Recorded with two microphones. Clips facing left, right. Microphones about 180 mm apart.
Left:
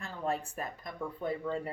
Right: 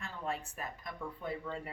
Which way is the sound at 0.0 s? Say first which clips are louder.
Left 5 dB; 40° left (ahead or behind).